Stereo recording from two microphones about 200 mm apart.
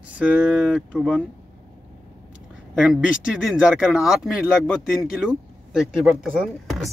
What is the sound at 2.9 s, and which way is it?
Speech, 5° right (ahead or behind).